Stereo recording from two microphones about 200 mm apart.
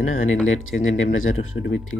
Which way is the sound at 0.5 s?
80° left.